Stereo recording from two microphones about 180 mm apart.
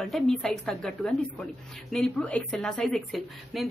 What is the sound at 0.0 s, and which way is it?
Speech, centre (ahead or behind).